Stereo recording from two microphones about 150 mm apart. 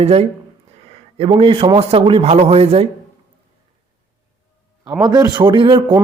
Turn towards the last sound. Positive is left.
turn(degrees=-30)  # may be behind; listen again after turning